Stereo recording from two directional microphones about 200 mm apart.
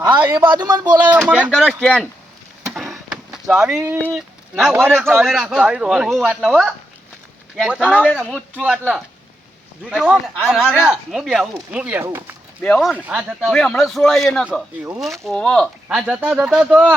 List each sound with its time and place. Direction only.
0.7 s speech: 20° right (ahead or behind)
1.2 s speech: 5° right (ahead or behind)
2.6 s a sound: centre (ahead or behind)
3.5 s a man's voice: 5° right (ahead or behind)
9.9 s speech: 5° right (ahead or behind)
12.6 s speech: centre (ahead or behind)